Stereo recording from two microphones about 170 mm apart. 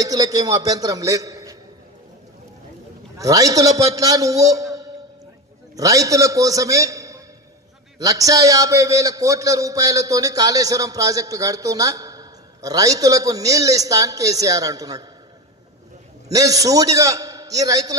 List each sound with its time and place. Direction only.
0.0 s a man's voice: 20° right (ahead or behind)
3.2 s a man's voice: 20° right (ahead or behind)
16.3 s a man's voice: 20° right (ahead or behind)